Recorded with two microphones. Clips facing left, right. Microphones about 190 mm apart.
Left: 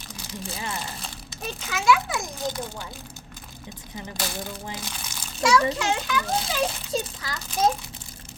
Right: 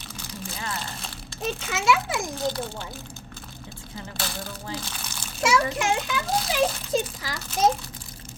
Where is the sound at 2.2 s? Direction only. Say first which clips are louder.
Right 3 dB; 15° left (ahead or behind).